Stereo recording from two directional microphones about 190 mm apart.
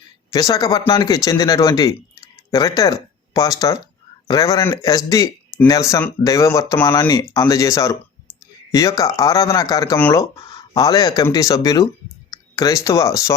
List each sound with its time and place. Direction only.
0.3 s speech: 20° left (ahead or behind)